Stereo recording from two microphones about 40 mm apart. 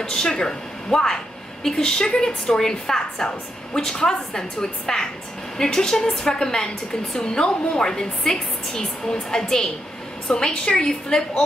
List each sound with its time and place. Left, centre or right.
0.0 s a woman's voice: centre